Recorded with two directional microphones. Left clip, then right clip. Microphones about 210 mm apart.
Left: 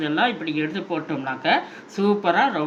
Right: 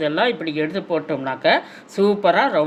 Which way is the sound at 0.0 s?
60° right (ahead or behind).